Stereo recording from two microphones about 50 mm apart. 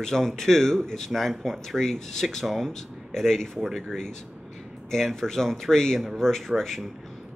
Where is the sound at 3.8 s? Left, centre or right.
Centre.